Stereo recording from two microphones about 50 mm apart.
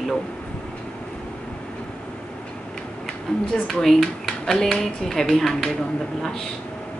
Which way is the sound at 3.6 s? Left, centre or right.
Centre.